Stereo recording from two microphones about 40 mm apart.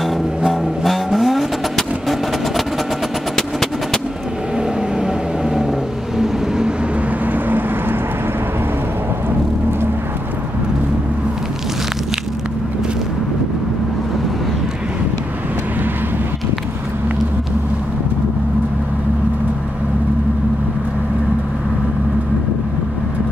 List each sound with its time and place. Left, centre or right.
0.5 s vehicle: centre
3.3 s percussion: centre
4.6 s vehicle: centre
7.3 s vehicle: right